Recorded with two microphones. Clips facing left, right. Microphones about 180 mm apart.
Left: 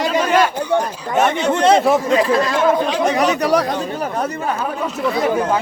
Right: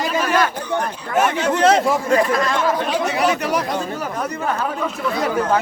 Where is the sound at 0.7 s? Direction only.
25° left (ahead or behind).